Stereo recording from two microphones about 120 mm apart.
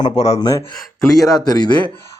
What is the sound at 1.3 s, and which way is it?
Speech, 35° left (ahead or behind).